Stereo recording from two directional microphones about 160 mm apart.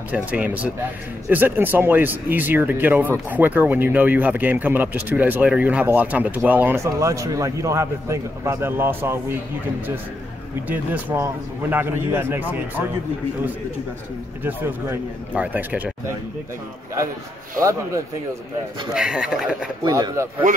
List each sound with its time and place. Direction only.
0.1 s speech: 10° right (ahead or behind)
10.7 s speech: 10° right (ahead or behind)
14.4 s speech: 10° right (ahead or behind)
18.9 s speech: 5° right (ahead or behind)
19.8 s speech: 20° right (ahead or behind)